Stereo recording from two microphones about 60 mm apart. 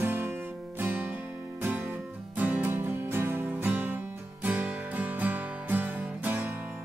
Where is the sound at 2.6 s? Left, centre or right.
Right.